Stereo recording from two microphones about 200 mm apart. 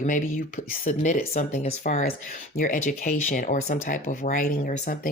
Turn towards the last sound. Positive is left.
turn(degrees=40)  # may be behind; listen again after turning